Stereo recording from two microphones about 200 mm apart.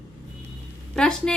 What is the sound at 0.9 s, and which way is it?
Speech, 5° left (ahead or behind).